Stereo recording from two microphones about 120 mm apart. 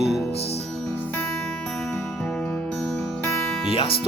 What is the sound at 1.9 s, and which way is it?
Music, 5° left (ahead or behind).